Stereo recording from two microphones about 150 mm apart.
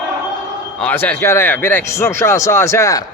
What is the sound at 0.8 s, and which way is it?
A man's voice, 10° left (ahead or behind).